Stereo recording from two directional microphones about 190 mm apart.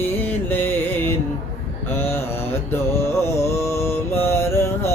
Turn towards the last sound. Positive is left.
turn(degrees=15)  # may be behind; listen again after turning